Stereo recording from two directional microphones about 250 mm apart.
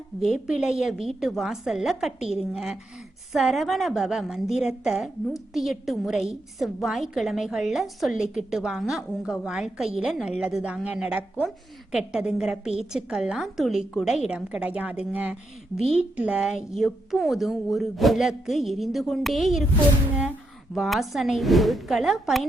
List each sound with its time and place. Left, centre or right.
0.2 s a woman's voice: centre
20.7 s a woman's voice: centre